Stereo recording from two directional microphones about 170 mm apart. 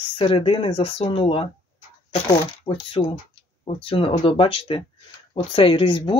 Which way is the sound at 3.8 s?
30° left (ahead or behind).